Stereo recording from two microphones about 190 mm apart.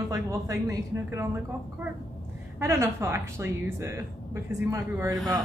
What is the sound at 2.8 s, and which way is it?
Speech, 15° right (ahead or behind).